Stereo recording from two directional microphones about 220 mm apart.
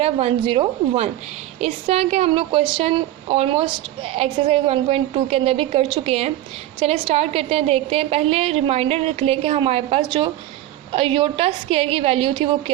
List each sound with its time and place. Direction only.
0.0 s a woman's voice: 25° right (ahead or behind)